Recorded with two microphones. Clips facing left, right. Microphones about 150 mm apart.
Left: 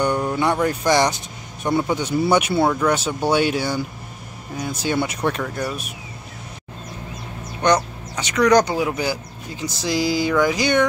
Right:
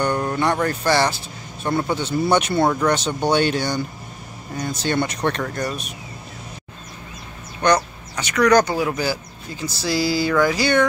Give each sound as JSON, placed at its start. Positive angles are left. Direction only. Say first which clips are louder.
{"t": 0.0, "sound": "speech", "louder": "left 1 dB", "side_deg": 10}
{"t": 7.6, "sound": "speech", "louder": "even", "side_deg": 20}